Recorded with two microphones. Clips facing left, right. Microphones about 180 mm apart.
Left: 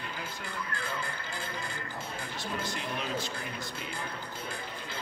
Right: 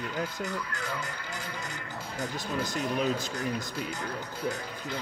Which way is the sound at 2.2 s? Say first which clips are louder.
Right 6 dB; 45° right (ahead or behind).